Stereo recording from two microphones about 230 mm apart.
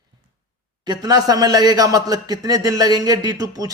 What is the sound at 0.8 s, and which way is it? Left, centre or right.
Speech, centre.